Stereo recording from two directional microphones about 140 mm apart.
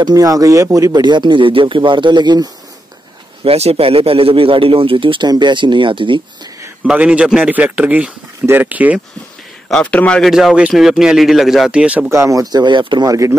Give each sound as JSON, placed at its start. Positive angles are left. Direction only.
{"t": 0.0, "sound": "speech", "side_deg": -25}
{"t": 3.4, "sound": "speech", "side_deg": -45}
{"t": 6.6, "sound": "a man's voice", "side_deg": -10}
{"t": 9.7, "sound": "speech", "side_deg": 5}
{"t": 12.1, "sound": "speech", "side_deg": -20}